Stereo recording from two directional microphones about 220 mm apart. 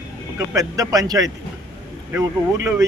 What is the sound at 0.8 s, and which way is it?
Speech, 15° right (ahead or behind).